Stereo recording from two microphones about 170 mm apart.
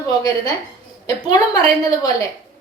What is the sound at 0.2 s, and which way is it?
A woman's voice, 20° left (ahead or behind).